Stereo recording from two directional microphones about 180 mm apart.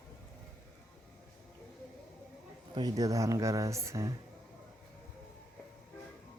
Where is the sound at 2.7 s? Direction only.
20° right (ahead or behind).